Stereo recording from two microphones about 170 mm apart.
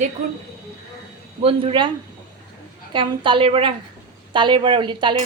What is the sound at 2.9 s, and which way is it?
A woman's voice, 30° right (ahead or behind).